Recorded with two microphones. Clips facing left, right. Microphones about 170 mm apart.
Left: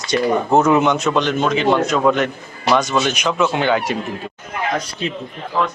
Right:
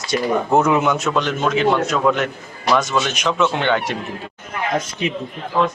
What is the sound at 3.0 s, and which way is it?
Speech, centre (ahead or behind).